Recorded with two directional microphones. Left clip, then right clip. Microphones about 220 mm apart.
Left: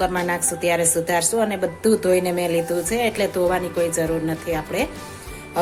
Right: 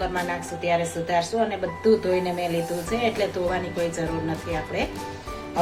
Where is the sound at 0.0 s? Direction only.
50° left (ahead or behind).